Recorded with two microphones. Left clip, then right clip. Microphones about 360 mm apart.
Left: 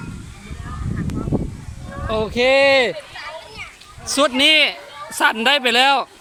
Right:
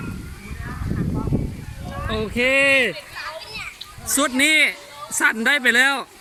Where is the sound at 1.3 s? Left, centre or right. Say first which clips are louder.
Left 5 dB; left.